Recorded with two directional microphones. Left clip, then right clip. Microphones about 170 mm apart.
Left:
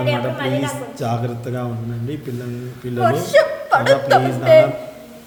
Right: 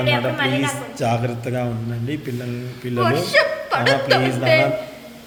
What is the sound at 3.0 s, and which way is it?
Speech, 40° left (ahead or behind).